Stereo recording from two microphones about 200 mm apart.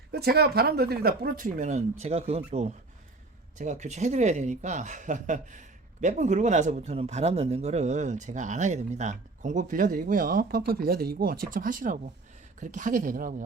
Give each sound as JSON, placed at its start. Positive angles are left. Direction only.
{"t": 0.1, "sound": "speech", "side_deg": -55}